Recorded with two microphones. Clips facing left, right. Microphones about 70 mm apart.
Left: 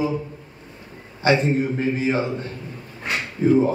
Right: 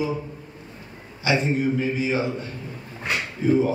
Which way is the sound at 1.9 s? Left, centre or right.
Left.